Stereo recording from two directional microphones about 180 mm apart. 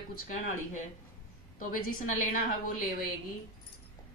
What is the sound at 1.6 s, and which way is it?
Speech, 50° left (ahead or behind).